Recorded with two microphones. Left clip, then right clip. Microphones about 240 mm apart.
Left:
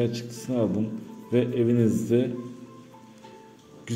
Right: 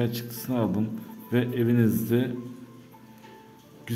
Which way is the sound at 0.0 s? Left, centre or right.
Centre.